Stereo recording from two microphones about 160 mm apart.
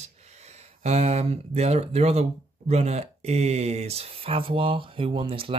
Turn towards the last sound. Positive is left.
turn(degrees=-35)  # may be behind; listen again after turning